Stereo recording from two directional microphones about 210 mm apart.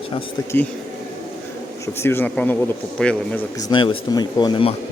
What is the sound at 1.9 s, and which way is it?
Speech, 10° left (ahead or behind).